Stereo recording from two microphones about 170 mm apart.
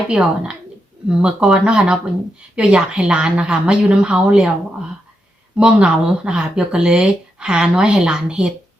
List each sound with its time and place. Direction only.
0.1 s speech: 5° right (ahead or behind)
5.5 s speech: 5° right (ahead or behind)